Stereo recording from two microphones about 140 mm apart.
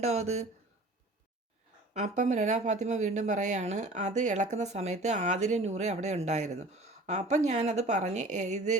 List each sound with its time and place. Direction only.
0.0 s speech: 50° right (ahead or behind)
1.9 s speech: 60° right (ahead or behind)